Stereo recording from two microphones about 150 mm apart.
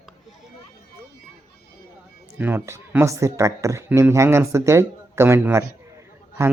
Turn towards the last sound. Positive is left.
turn(degrees=-20)  # may be behind; listen again after turning